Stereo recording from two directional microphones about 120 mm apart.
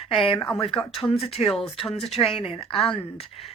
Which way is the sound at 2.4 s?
50° left (ahead or behind).